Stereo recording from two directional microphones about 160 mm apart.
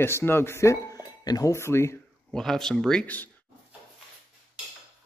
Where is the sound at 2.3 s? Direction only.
5° left (ahead or behind).